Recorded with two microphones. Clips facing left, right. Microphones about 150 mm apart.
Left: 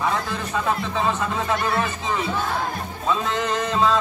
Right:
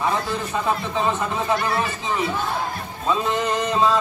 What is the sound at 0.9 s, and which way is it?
Speech, 20° right (ahead or behind).